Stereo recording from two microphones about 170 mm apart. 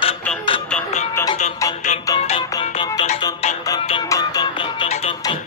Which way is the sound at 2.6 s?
35° left (ahead or behind).